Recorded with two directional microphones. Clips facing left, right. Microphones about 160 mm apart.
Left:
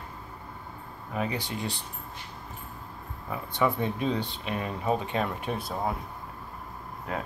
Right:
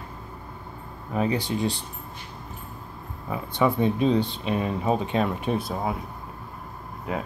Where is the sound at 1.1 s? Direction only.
30° right (ahead or behind).